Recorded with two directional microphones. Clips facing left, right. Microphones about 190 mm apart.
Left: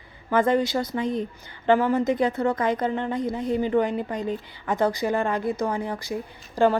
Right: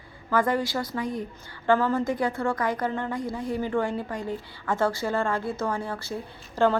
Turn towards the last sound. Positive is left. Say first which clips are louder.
# left 2 dB
turn(degrees=15)  # may be behind; listen again after turning